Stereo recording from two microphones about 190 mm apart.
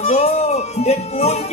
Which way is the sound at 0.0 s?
35° left (ahead or behind).